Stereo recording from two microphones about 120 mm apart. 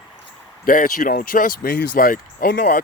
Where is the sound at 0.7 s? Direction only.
90° left.